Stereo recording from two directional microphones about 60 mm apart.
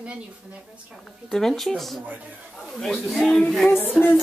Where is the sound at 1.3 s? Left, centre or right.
Centre.